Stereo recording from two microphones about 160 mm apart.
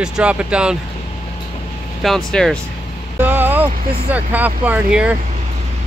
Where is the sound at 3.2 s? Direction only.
10° right (ahead or behind).